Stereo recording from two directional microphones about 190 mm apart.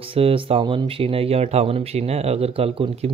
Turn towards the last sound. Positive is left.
turn(degrees=-30)  # may be behind; listen again after turning